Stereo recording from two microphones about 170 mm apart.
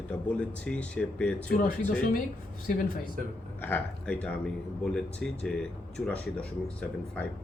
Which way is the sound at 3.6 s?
10° left (ahead or behind).